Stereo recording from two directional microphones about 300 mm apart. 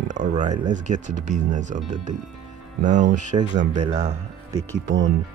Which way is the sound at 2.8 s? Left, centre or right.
Right.